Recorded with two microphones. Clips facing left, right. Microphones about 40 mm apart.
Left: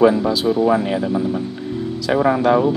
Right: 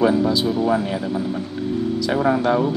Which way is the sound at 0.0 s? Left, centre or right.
Centre.